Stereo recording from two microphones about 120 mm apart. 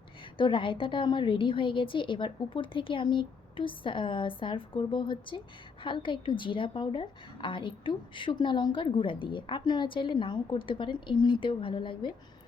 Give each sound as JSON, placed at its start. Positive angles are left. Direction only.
{"t": 0.3, "sound": "a woman's voice", "side_deg": 45}